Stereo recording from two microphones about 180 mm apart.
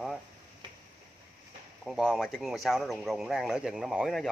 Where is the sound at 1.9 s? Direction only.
Centre (ahead or behind).